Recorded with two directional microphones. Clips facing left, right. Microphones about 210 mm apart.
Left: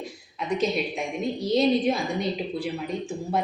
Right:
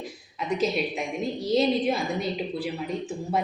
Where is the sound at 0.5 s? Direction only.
Centre (ahead or behind).